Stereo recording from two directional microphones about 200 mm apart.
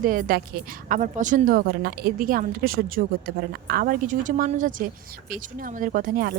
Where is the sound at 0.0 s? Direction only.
45° right (ahead or behind).